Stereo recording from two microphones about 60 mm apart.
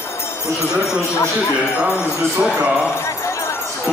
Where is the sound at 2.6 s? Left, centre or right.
Centre.